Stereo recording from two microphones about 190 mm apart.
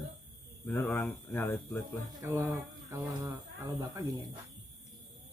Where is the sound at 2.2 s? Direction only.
15° right (ahead or behind).